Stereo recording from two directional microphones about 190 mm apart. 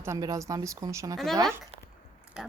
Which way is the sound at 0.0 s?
15° right (ahead or behind).